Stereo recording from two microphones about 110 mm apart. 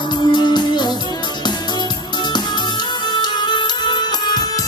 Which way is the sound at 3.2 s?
40° left (ahead or behind).